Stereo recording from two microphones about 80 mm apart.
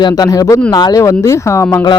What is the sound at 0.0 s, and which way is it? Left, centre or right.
Speech, left.